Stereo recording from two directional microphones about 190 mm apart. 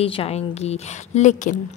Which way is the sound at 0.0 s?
30° left (ahead or behind).